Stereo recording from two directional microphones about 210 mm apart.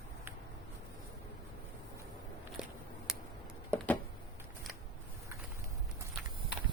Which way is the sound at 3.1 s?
Centre (ahead or behind).